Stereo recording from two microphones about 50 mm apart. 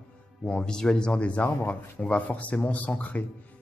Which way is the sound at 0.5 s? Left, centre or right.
Centre.